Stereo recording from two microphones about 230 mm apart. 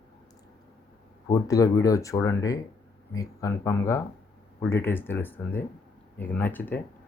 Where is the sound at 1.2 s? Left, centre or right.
Centre.